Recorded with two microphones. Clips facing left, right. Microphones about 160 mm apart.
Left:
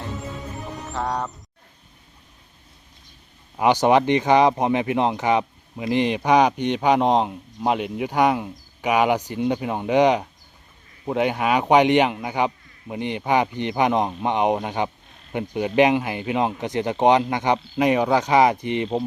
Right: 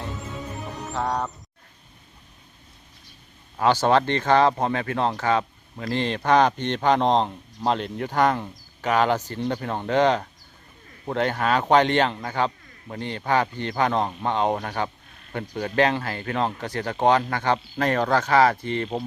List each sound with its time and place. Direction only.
0.8 s music: centre (ahead or behind)
3.6 s speech: 15° left (ahead or behind)